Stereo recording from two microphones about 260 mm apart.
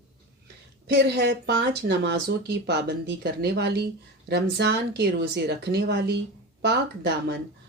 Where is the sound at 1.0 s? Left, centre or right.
Right.